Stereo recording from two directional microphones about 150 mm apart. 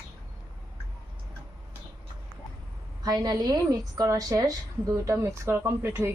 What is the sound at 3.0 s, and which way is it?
A woman's voice, 25° right (ahead or behind).